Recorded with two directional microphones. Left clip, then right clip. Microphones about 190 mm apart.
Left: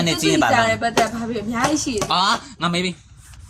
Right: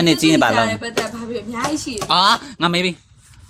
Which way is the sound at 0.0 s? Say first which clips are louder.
Right 4 dB; 65° right (ahead or behind).